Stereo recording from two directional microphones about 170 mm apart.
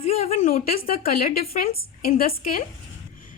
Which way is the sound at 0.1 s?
35° left (ahead or behind).